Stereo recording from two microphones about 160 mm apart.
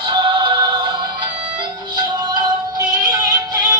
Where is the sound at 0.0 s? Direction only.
30° right (ahead or behind).